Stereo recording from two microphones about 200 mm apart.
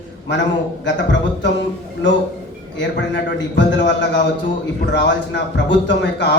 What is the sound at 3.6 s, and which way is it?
A man's voice, 65° left (ahead or behind).